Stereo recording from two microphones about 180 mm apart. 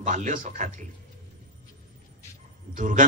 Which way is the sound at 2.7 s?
45° right (ahead or behind).